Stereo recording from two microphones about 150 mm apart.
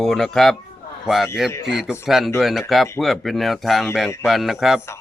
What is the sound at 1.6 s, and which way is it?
Speech, 5° right (ahead or behind).